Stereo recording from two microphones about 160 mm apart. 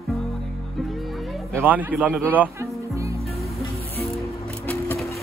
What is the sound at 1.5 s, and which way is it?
Speech, 10° right (ahead or behind).